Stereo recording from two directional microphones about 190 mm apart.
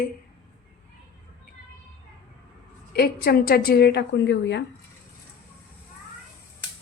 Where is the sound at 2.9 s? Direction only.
55° left (ahead or behind).